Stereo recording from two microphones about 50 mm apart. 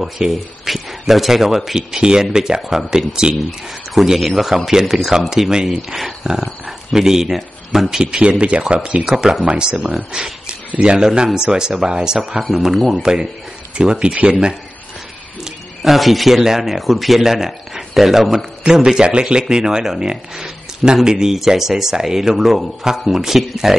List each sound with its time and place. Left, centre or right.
0.0 s a man's voice: centre
8.0 s speech: centre
9.0 s speech: centre
9.4 s speech: centre
10.1 s speech: centre
15.4 s speech: centre
18.9 s speech: centre